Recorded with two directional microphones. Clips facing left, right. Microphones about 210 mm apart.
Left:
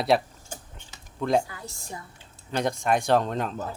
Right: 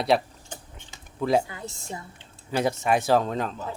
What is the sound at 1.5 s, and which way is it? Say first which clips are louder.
Speech: right 3 dB; 25° right (ahead or behind).